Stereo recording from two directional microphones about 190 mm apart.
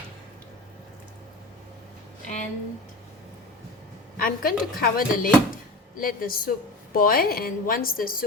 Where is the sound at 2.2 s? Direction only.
40° left (ahead or behind).